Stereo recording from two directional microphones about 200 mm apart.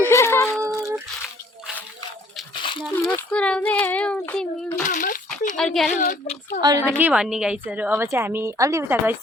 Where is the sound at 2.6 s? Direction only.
25° left (ahead or behind).